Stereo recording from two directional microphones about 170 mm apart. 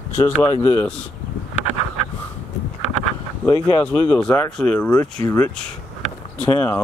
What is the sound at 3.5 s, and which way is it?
Speech, 25° left (ahead or behind).